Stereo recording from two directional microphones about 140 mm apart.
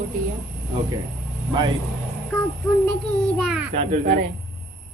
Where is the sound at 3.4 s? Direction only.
Centre (ahead or behind).